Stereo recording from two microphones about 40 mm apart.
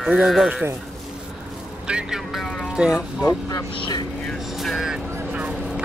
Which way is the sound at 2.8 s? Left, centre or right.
Right.